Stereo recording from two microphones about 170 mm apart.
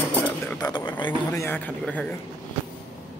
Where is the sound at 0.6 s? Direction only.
25° left (ahead or behind).